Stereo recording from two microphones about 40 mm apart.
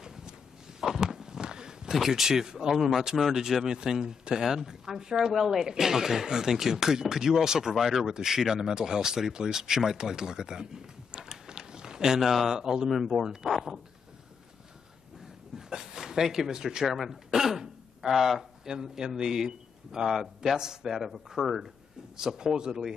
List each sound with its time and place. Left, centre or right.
0.0 s walk: centre
0.7 s a sound: centre
2.0 s speech: centre
15.5 s speech: centre
16.8 s speech: centre
20.9 s speech: centre
22.1 s speech: centre